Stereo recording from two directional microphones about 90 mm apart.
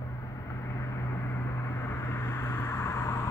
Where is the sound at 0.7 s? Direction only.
30° left (ahead or behind).